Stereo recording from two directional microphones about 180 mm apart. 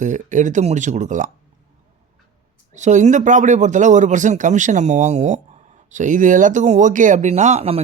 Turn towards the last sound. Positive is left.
turn(degrees=-35)  # may be behind; listen again after turning